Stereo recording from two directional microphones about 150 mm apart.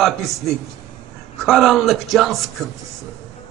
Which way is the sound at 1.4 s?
Centre (ahead or behind).